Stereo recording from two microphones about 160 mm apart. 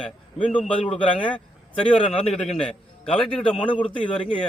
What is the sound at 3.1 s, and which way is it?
A man's voice, 35° left (ahead or behind).